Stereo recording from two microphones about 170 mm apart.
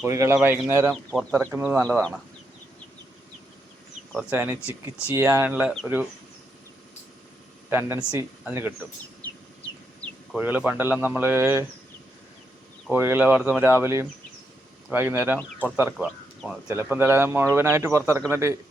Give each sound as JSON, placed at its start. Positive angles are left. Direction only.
{"t": 0.0, "sound": "speech", "side_deg": -15}
{"t": 1.8, "sound": "speech", "side_deg": 5}
{"t": 4.1, "sound": "speech", "side_deg": -5}
{"t": 7.7, "sound": "speech", "side_deg": -15}
{"t": 10.3, "sound": "speech", "side_deg": -10}
{"t": 12.9, "sound": "speech", "side_deg": -10}